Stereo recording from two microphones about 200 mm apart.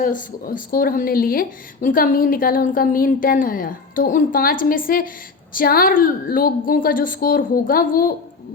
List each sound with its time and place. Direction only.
0.0 s speech: 45° left (ahead or behind)